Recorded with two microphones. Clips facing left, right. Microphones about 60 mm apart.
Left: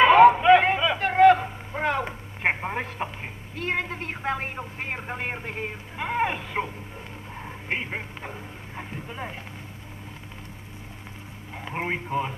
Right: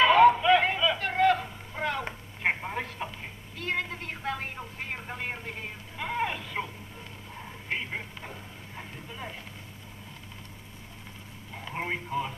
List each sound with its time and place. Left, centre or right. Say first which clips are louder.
0.0 s a sound: left 5 dB; left
2.4 s telephone: left 3 dB; left
7.4 s radio: left 4 dB; left
11.5 s radio: left 4 dB; left